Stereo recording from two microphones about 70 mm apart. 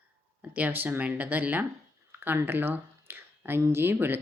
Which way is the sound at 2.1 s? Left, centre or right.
Right.